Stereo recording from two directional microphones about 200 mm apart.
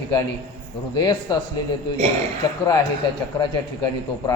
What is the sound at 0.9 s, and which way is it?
Speech, 20° left (ahead or behind).